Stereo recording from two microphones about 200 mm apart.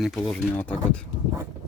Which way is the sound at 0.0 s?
Centre (ahead or behind).